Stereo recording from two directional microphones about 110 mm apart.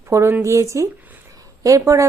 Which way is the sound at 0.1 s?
25° right (ahead or behind).